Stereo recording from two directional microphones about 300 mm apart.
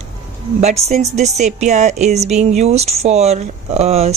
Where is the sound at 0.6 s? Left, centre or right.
Right.